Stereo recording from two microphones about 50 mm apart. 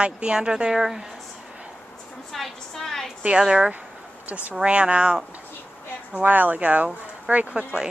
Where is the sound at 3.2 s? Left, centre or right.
Centre.